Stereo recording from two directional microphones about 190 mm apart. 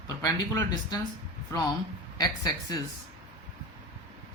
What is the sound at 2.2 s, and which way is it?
Speech, 20° left (ahead or behind).